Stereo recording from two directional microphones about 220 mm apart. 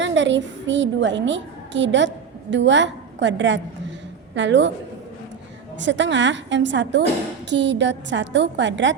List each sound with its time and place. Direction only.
0.0 s a child's voice: 55° right (ahead or behind)
5.8 s a woman's voice: 55° right (ahead or behind)